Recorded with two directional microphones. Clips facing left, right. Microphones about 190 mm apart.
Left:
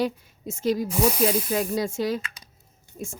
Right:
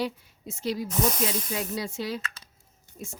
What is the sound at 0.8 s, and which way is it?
Speech, 10° left (ahead or behind).